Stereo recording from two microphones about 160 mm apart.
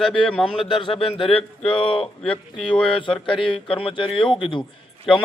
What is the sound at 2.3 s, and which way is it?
Speech, 5° left (ahead or behind).